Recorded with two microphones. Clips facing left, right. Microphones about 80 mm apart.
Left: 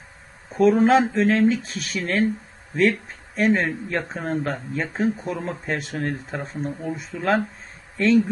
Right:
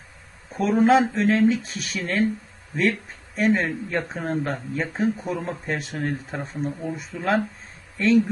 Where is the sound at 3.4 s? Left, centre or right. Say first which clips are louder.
Left 1 dB; centre.